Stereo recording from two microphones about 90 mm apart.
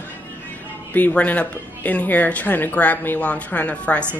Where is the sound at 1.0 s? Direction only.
15° left (ahead or behind).